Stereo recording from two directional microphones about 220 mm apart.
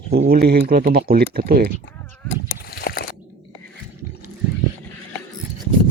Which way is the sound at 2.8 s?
45° left (ahead or behind).